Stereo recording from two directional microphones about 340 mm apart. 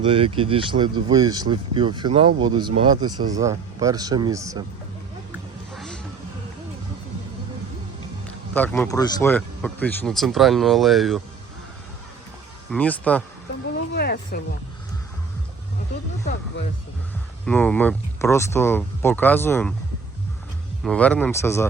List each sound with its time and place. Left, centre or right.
0.0 s speech: centre
5.7 s a sound: centre
8.5 s speech: centre
12.7 s speech: centre
13.9 s a sound: left
17.4 s speech: centre
20.8 s speech: centre